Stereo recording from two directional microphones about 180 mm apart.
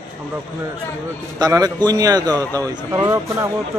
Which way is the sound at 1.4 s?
20° right (ahead or behind).